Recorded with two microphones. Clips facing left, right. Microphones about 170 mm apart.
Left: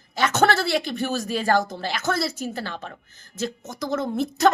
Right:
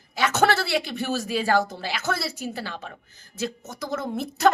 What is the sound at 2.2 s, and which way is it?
Speech, 45° left (ahead or behind).